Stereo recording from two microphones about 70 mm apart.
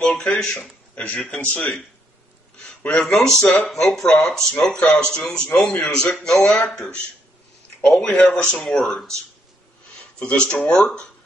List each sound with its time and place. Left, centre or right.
0.0 s speech: centre
0.6 s speech: centre
2.6 s a sound: centre
3.0 s speech: centre
7.8 s speech: centre
8.2 s speech: centre
8.6 s speech: centre
10.1 s speech: centre